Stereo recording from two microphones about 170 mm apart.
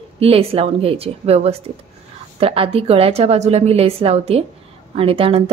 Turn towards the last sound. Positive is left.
turn(degrees=-35)  # may be behind; listen again after turning